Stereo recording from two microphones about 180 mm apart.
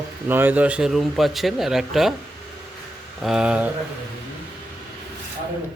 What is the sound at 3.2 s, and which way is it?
Speech, 5° right (ahead or behind).